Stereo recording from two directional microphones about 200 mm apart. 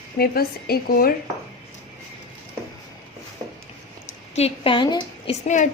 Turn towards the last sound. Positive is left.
turn(degrees=40)  # may be behind; listen again after turning